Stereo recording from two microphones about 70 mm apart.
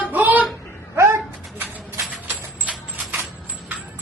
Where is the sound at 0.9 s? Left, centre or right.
Right.